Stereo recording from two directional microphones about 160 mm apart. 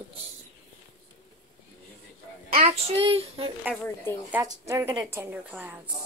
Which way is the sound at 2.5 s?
35° right (ahead or behind).